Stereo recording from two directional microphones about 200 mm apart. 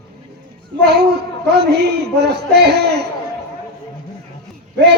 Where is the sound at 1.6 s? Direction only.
55° right (ahead or behind).